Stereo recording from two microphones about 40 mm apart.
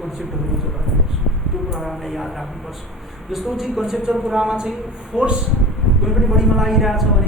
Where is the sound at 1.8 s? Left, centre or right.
Centre.